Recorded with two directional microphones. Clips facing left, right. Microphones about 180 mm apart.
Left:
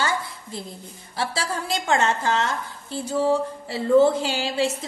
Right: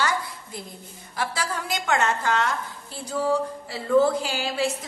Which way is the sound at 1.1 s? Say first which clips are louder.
Left 1 dB; 30° left (ahead or behind).